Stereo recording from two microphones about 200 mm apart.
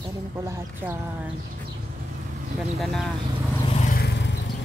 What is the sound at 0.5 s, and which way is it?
Speech, 10° right (ahead or behind).